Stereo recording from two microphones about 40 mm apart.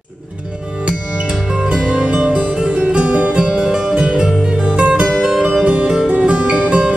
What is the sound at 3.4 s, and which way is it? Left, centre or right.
Music, centre.